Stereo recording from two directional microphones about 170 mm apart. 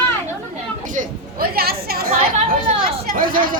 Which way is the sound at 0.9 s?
60° right (ahead or behind).